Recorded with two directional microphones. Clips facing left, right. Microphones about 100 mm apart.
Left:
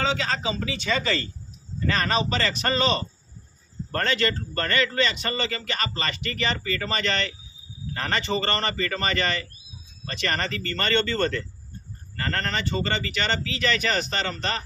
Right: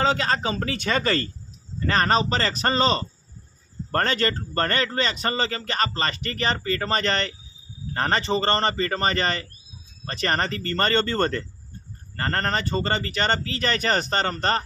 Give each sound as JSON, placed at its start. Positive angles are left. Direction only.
{"t": 0.0, "sound": "a man's voice", "side_deg": -45}